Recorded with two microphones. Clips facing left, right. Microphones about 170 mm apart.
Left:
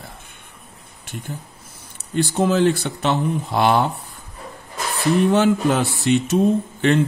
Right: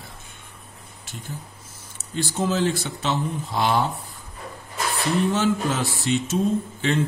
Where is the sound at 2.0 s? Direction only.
60° left (ahead or behind).